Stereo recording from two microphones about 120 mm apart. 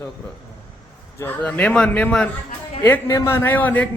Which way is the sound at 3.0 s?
25° left (ahead or behind).